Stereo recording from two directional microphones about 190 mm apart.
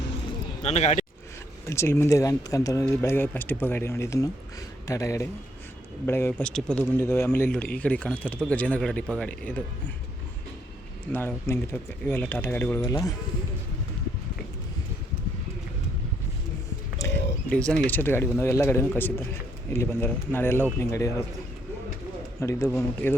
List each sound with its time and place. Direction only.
0.6 s speech: 35° left (ahead or behind)
1.6 s a man's voice: 15° left (ahead or behind)
11.1 s a man's voice: 10° left (ahead or behind)
17.0 s a sound: 15° left (ahead or behind)
17.8 s a man's voice: 10° left (ahead or behind)
22.4 s a man's voice: 15° left (ahead or behind)